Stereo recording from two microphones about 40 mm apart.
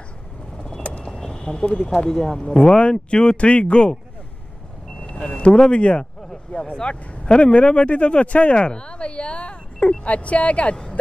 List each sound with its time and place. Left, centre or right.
1.0 s a sound: centre
2.0 s speech: centre
5.0 s speech: left